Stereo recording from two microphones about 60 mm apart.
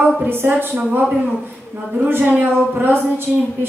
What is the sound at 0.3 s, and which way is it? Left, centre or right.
Speech, right.